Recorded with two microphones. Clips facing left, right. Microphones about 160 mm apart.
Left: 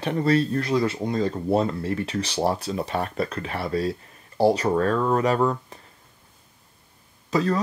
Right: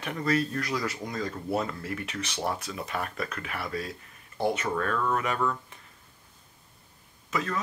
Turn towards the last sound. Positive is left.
turn(degrees=35)  # may be behind; listen again after turning